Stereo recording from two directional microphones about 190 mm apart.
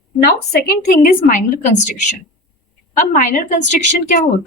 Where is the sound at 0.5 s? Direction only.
50° left (ahead or behind).